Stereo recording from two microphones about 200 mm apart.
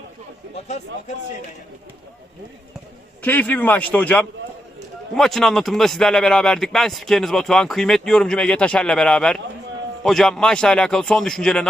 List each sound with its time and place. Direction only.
0.5 s speech: 35° left (ahead or behind)
3.2 s a man's voice: 10° left (ahead or behind)